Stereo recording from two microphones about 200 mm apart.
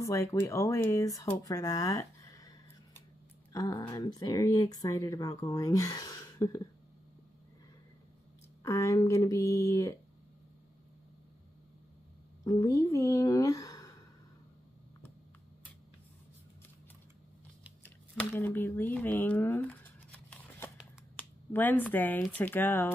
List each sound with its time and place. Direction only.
0.0 s speech: 15° left (ahead or behind)
8.6 s speech: 15° left (ahead or behind)
12.4 s speech: 15° left (ahead or behind)
17.8 s a sound: 10° left (ahead or behind)
21.2 s speech: 10° left (ahead or behind)